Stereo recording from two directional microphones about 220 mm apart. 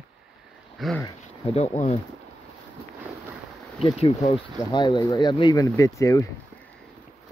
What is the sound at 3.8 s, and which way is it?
Speech, 25° left (ahead or behind).